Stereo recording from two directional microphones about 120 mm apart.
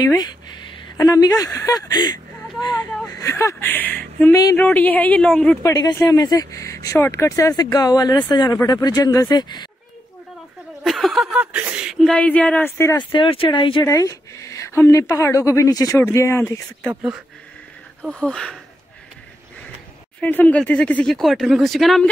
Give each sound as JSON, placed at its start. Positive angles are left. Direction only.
{"t": 0.8, "sound": "a woman's voice", "side_deg": 35}
{"t": 4.3, "sound": "speech", "side_deg": 30}
{"t": 4.6, "sound": "speech", "side_deg": 15}
{"t": 5.6, "sound": "a woman's voice", "side_deg": 35}
{"t": 10.8, "sound": "speech", "side_deg": 0}
{"t": 12.2, "sound": "speech", "side_deg": 10}
{"t": 13.1, "sound": "speech", "side_deg": 45}
{"t": 13.8, "sound": "speech", "side_deg": 30}
{"t": 18.0, "sound": "speech", "side_deg": 5}
{"t": 20.2, "sound": "speech", "side_deg": 15}